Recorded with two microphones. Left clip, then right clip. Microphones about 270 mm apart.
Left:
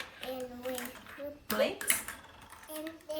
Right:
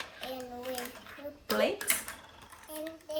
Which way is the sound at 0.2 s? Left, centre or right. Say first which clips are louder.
Left 2 dB; centre.